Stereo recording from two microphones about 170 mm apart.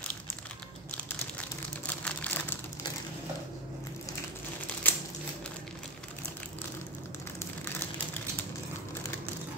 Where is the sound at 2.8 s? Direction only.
25° left (ahead or behind).